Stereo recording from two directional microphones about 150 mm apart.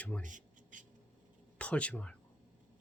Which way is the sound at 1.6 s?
10° left (ahead or behind).